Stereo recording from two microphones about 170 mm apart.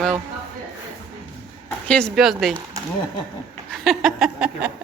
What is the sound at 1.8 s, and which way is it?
Speech, 5° left (ahead or behind).